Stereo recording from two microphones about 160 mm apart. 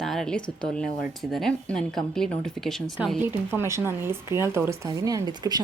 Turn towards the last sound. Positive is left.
turn(degrees=-25)  # may be behind; listen again after turning